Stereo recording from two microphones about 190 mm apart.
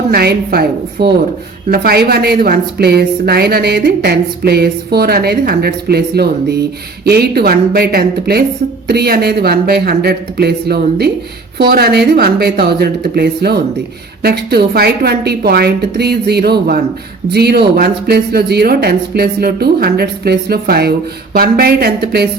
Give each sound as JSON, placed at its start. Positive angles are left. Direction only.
{"t": 0.1, "sound": "a woman's voice", "side_deg": -55}